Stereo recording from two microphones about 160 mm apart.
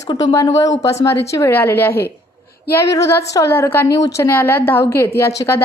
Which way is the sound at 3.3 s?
15° left (ahead or behind).